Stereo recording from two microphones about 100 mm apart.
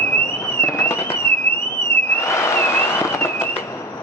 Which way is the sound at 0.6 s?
25° left (ahead or behind).